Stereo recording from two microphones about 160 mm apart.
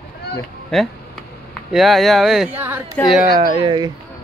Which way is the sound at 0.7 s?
Centre (ahead or behind).